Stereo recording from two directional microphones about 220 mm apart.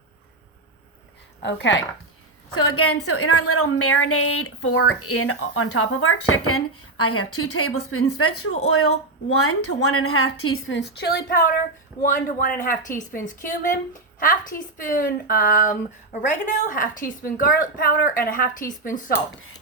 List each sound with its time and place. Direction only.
1.4 s speech: 55° left (ahead or behind)
2.6 s a woman's voice: 85° left
7.0 s a woman's voice: 85° left; by 19.1 s 40° left (ahead or behind)